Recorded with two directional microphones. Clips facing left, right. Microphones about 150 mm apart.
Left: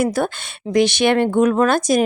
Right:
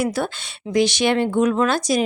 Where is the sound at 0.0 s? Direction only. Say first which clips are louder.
Left 3 dB; 50° left (ahead or behind).